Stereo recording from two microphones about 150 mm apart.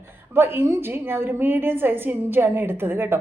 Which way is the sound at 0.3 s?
15° right (ahead or behind).